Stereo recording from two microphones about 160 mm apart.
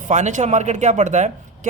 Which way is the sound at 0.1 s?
50° right (ahead or behind).